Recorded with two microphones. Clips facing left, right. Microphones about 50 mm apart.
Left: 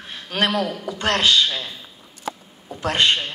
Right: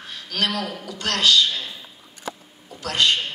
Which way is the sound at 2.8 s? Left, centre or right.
Left.